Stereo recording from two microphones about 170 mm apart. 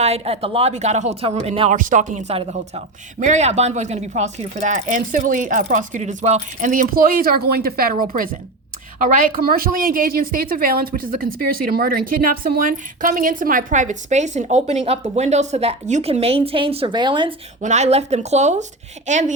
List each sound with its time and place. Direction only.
0.0 s speech: 35° right (ahead or behind)
1.7 s a woman's voice: 50° right (ahead or behind); by 17.3 s 30° right (ahead or behind)
17.6 s speech: 45° right (ahead or behind)